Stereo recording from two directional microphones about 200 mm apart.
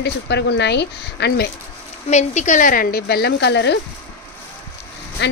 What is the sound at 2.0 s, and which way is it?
Speech, 35° left (ahead or behind).